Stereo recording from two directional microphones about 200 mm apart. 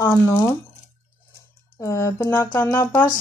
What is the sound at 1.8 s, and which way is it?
Speech, 15° left (ahead or behind).